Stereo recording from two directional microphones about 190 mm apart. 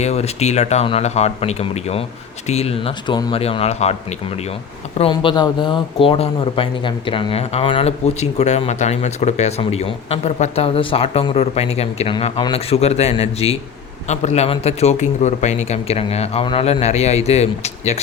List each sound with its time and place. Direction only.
0.0 s speech: 35° left (ahead or behind)
4.9 s speech: 25° left (ahead or behind)